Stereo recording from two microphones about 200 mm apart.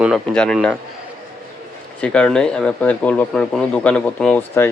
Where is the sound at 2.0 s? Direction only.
5° left (ahead or behind).